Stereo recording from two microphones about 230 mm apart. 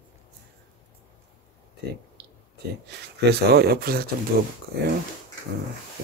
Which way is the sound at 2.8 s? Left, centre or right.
Right.